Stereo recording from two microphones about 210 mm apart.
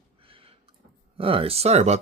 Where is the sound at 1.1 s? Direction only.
25° right (ahead or behind).